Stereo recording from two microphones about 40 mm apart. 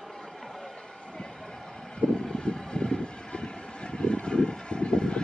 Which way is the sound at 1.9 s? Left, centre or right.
Left.